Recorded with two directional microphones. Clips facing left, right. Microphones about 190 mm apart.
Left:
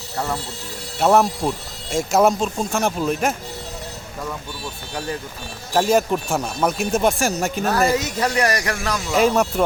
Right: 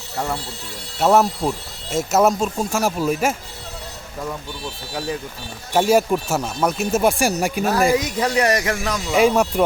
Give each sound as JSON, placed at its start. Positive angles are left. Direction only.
{"t": 0.9, "sound": "speech", "side_deg": 0}
{"t": 5.7, "sound": "speech", "side_deg": -10}
{"t": 9.1, "sound": "speech", "side_deg": -10}